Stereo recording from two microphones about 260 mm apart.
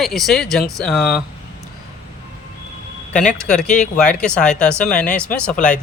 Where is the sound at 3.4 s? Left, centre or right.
Centre.